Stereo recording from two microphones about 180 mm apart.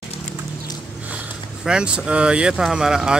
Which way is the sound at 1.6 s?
5° right (ahead or behind).